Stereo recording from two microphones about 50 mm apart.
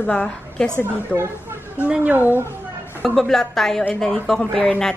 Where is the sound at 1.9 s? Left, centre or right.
Right.